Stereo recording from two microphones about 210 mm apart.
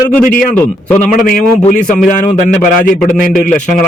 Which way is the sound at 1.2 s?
40° left (ahead or behind).